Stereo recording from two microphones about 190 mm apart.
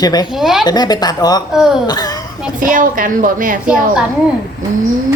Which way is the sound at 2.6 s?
45° right (ahead or behind).